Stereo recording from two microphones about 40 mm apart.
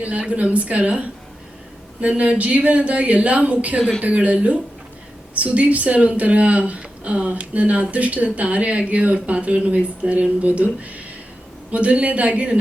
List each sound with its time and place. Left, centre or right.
0.0 s speech: right